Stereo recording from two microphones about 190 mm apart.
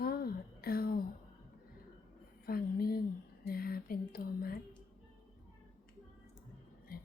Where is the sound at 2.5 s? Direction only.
50° left (ahead or behind).